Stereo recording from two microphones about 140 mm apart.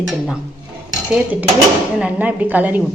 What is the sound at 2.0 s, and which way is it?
Speech, 10° right (ahead or behind).